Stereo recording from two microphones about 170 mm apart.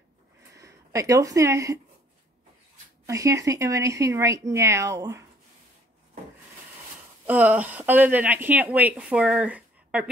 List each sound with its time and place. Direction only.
0.6 s speech: 20° right (ahead or behind)
3.1 s speech: 20° right (ahead or behind)
7.2 s speech: 10° right (ahead or behind)